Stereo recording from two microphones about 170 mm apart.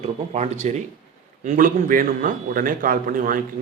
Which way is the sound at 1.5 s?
55° right (ahead or behind).